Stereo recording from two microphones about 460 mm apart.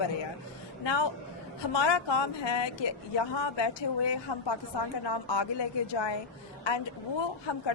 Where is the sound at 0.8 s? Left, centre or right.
Left.